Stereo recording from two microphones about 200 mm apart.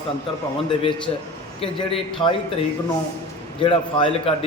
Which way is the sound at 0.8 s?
25° left (ahead or behind).